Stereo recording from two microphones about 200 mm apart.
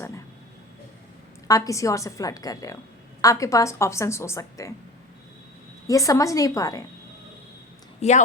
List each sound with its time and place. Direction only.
1.5 s speech: 15° left (ahead or behind)
5.9 s speech: 15° left (ahead or behind)
8.0 s speech: 35° left (ahead or behind)